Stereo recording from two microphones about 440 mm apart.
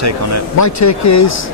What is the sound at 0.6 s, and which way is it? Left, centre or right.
Speech, left.